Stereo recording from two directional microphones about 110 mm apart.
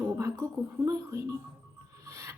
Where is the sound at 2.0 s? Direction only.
25° right (ahead or behind).